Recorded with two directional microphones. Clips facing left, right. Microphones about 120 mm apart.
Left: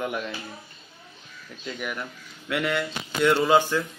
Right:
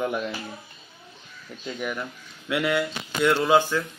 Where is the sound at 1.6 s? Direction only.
20° right (ahead or behind).